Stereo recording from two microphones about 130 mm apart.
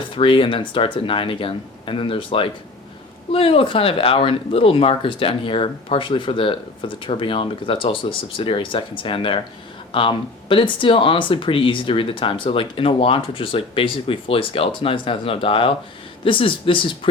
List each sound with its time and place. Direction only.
0.2 s speech: 40° left (ahead or behind)